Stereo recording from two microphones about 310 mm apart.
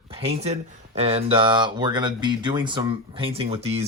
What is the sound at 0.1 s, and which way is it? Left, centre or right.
Speech, centre.